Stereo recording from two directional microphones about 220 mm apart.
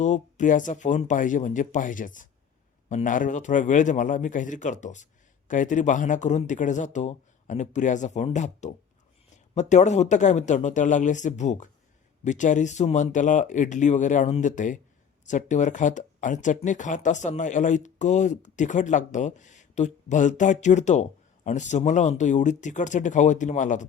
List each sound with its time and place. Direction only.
0.0 s speech: 35° left (ahead or behind)